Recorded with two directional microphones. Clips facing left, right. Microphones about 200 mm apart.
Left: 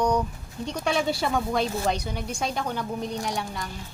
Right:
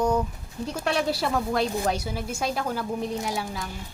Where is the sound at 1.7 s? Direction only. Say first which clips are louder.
Even; 10° right (ahead or behind).